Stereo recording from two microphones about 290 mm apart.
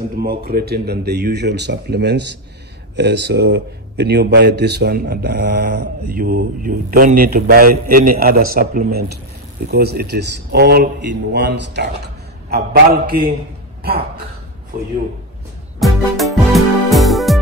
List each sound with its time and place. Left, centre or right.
0.2 s speech: right
15.8 s music: centre